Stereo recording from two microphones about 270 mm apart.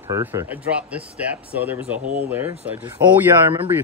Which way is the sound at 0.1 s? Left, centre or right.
Centre.